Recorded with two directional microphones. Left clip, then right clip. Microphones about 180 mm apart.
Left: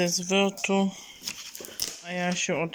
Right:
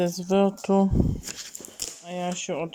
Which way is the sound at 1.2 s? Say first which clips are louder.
Left 1 dB; 60° right (ahead or behind).